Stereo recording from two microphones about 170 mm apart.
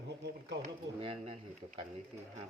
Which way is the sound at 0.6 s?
35° right (ahead or behind).